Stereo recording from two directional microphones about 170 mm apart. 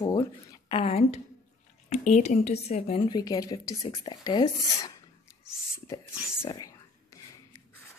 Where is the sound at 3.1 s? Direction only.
25° left (ahead or behind).